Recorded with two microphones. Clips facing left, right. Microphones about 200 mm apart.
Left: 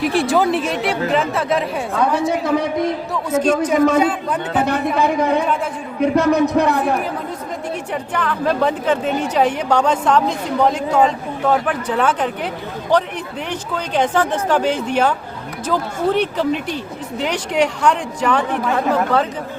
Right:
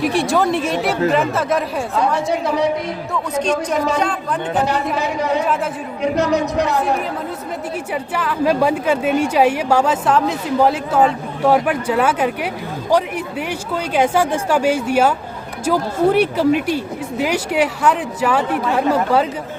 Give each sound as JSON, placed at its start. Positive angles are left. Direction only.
{"t": 0.0, "sound": "speech", "side_deg": 0}
{"t": 1.9, "sound": "a woman's voice", "side_deg": 55}
{"t": 3.8, "sound": "speech", "side_deg": 55}
{"t": 8.1, "sound": "a woman's voice", "side_deg": -10}